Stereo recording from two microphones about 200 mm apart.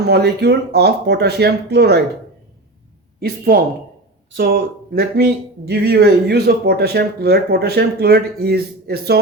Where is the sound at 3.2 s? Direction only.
50° right (ahead or behind).